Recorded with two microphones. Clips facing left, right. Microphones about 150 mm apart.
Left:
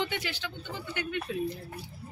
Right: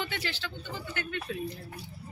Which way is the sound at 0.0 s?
15° left (ahead or behind).